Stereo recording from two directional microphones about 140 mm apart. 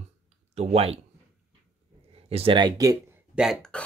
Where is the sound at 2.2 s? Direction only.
45° right (ahead or behind).